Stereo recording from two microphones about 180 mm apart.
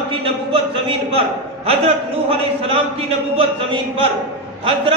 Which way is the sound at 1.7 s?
30° right (ahead or behind).